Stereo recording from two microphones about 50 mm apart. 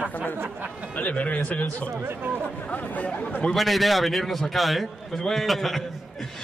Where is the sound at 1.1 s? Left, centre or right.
Left.